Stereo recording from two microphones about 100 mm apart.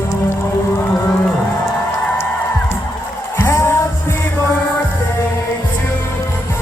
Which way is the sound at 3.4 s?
30° left (ahead or behind).